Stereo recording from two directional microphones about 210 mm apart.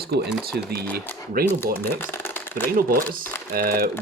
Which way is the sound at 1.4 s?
45° right (ahead or behind).